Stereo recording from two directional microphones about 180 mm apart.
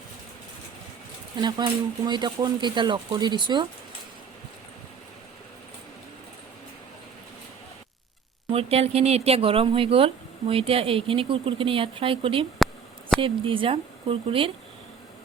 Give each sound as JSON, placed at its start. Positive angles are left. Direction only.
{"t": 1.4, "sound": "speech", "side_deg": -25}
{"t": 8.4, "sound": "speech", "side_deg": -30}